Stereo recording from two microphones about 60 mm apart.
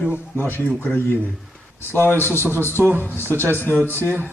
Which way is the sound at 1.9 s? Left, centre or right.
Left.